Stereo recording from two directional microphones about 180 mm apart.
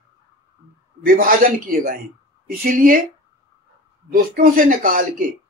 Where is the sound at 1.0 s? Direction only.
50° right (ahead or behind).